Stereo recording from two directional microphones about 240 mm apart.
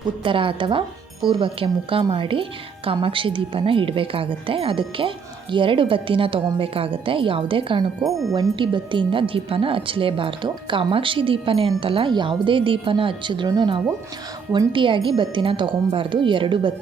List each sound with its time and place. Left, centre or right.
0.3 s speech: right